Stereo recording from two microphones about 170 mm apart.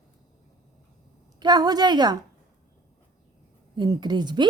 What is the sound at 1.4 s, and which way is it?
Speech, 25° right (ahead or behind).